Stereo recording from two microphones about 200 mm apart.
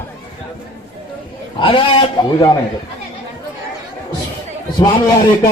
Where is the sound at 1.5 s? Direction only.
25° left (ahead or behind).